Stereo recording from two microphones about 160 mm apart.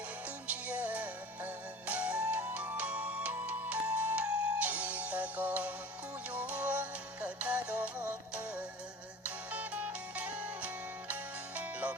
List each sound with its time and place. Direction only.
0.4 s music: 10° right (ahead or behind)